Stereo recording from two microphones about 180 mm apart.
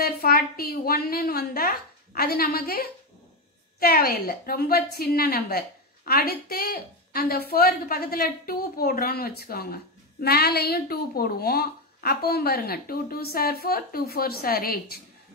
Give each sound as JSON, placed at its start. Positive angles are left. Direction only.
{"t": 0.0, "sound": "a woman's voice", "side_deg": 55}